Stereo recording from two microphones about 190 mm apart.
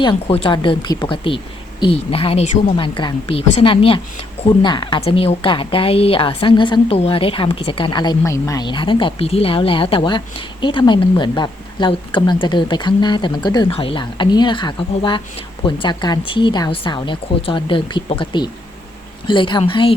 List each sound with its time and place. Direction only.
0.0 s a woman's voice: 25° left (ahead or behind)